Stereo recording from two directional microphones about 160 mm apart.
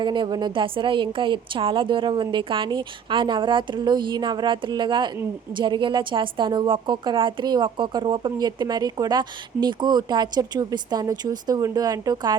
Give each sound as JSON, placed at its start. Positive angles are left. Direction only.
{"t": 0.0, "sound": "a woman's voice", "side_deg": -30}